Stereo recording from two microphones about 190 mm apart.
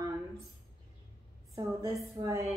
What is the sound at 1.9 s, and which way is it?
Speech, 15° right (ahead or behind).